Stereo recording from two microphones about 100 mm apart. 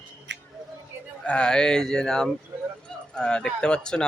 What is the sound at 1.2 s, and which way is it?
Speech, 10° left (ahead or behind).